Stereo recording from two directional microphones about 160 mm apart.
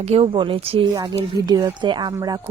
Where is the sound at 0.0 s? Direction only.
40° right (ahead or behind).